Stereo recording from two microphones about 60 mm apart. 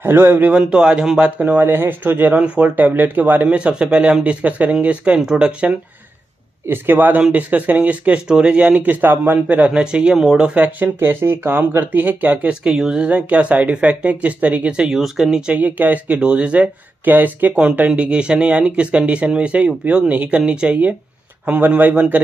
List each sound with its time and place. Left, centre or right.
0.0 s speech: right
0.5 s speech: centre
1.2 s speech: right
3.4 s speech: centre
6.7 s speech: right
8.8 s speech: right
10.1 s speech: centre
10.5 s speech: right
11.8 s speech: right
12.6 s speech: centre
15.0 s speech: centre
15.5 s speech: right